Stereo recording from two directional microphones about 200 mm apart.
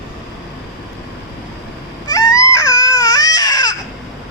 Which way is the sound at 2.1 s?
15° left (ahead or behind).